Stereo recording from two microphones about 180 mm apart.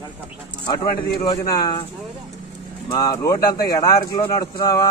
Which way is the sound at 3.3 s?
60° left (ahead or behind).